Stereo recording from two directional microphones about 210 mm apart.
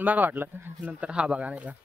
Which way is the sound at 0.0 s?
10° right (ahead or behind).